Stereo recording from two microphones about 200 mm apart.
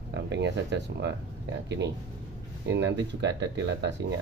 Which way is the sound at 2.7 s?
60° right (ahead or behind).